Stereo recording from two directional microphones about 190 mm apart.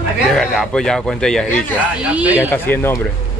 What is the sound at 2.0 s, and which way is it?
Speech, 5° right (ahead or behind).